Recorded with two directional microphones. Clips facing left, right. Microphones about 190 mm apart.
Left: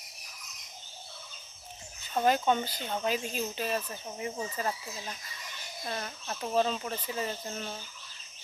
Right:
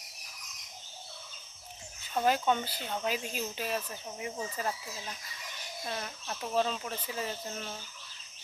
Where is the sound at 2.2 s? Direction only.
5° right (ahead or behind).